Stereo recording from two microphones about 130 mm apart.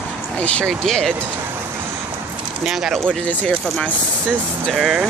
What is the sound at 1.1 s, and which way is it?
Speech, 15° right (ahead or behind).